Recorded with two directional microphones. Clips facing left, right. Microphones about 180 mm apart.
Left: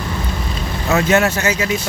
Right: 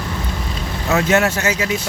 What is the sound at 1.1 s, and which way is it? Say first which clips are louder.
Speech: left 1 dB; 10° right (ahead or behind).